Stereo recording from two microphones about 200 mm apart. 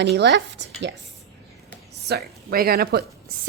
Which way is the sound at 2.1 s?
50° right (ahead or behind).